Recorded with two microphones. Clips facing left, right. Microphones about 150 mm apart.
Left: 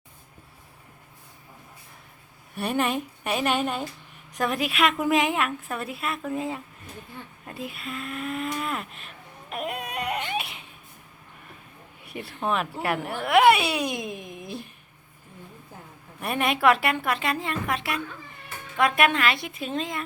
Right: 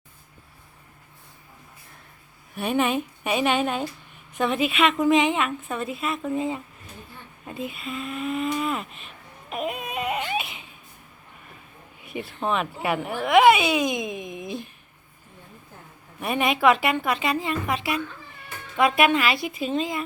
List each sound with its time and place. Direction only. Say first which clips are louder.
2.6 s a woman's voice: right 2 dB; centre (ahead or behind)
7.4 s a sound: right 4 dB; centre (ahead or behind)
12.4 s a woman's voice: right 1 dB; centre (ahead or behind)
16.2 s a woman's voice: right 2 dB; centre (ahead or behind)